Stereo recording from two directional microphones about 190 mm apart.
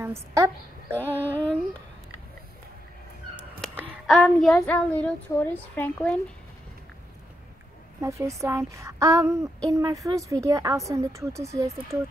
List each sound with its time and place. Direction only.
0.0 s a woman's voice: 15° right (ahead or behind)
1.2 s a child's voice: 10° left (ahead or behind)
4.1 s child singing: centre (ahead or behind)
4.6 s a child's voice: 10° left (ahead or behind)
8.0 s a woman's voice: 15° right (ahead or behind)